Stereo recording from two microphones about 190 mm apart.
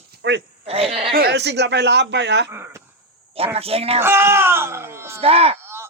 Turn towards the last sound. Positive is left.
turn(degrees=-30)  # may be behind; listen again after turning